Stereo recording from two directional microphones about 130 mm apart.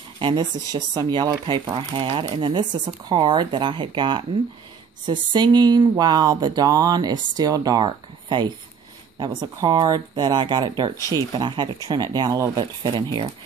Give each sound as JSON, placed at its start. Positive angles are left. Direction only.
{"t": 0.2, "sound": "speech", "side_deg": -35}